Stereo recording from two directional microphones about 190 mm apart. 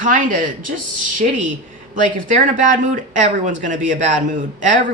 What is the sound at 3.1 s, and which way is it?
Speech, 40° right (ahead or behind).